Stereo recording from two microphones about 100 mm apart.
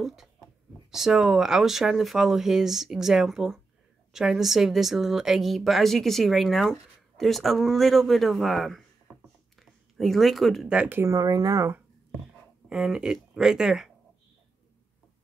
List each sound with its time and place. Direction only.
0.0 s a woman's voice: 5° right (ahead or behind)
9.6 s a sound: centre (ahead or behind)
10.7 s speech: 15° right (ahead or behind)
11.0 s speech: 35° right (ahead or behind)
12.6 s speech: 5° right (ahead or behind)